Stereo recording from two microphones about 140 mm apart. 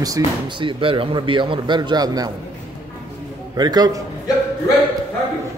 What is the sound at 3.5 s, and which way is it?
Speech, 30° right (ahead or behind).